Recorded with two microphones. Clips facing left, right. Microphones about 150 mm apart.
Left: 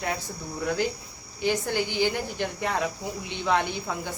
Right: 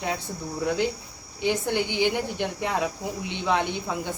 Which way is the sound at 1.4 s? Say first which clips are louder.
Right 1 dB; 20° right (ahead or behind).